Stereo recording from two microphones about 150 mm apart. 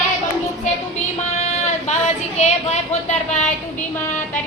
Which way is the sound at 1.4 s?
50° left (ahead or behind).